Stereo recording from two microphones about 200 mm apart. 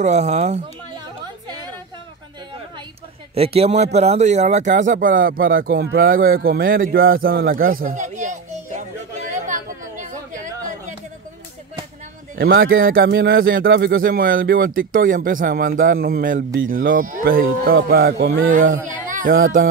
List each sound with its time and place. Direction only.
0.0 s speech: 35° right (ahead or behind)
3.3 s speech: 30° right (ahead or behind); by 7.6 s 50° right (ahead or behind)
7.7 s children playing: 40° right (ahead or behind)
9.3 s chatter: 40° right (ahead or behind)
12.4 s speech: 50° right (ahead or behind)
18.9 s a sound: 40° right (ahead or behind)